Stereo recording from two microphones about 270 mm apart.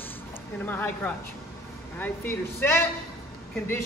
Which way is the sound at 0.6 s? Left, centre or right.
Centre.